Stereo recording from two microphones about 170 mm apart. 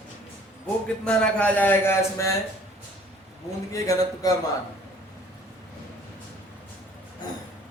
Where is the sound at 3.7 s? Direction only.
20° left (ahead or behind).